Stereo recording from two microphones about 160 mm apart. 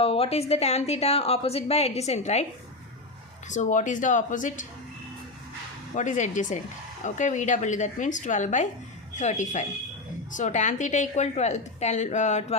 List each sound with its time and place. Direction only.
0.0 s a woman's voice: 40° left (ahead or behind)
3.5 s a woman's voice: 50° left (ahead or behind)
6.0 s a woman's voice: 50° left (ahead or behind)